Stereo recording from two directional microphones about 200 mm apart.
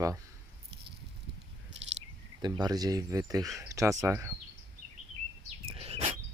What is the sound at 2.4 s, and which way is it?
Speech, 20° right (ahead or behind).